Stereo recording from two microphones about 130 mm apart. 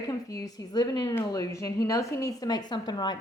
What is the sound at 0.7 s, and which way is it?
A woman's voice, 30° left (ahead or behind).